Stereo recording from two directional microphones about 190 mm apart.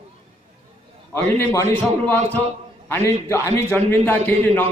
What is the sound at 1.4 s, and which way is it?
A man's voice, 15° left (ahead or behind).